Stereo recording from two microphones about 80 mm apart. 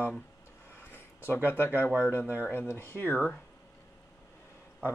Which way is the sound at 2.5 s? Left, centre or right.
Left.